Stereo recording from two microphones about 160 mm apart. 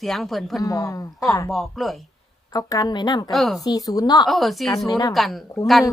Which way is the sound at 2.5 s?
25° left (ahead or behind).